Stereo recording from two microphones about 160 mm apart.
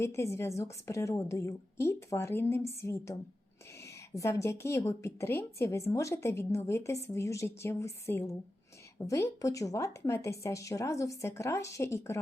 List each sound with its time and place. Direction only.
0.0 s a woman's voice: 15° left (ahead or behind)